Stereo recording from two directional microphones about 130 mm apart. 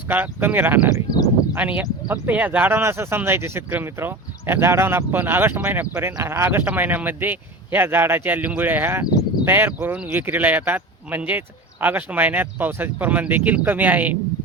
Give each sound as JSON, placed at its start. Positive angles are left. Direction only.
{"t": 0.1, "sound": "speech", "side_deg": -15}